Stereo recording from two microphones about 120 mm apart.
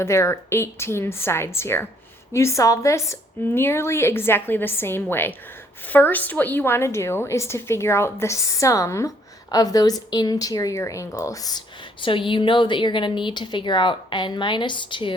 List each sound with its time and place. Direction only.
0.0 s a woman's voice: 20° left (ahead or behind); by 15.1 s 45° left (ahead or behind)